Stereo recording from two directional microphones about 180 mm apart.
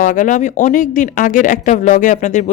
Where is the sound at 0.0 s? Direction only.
45° left (ahead or behind).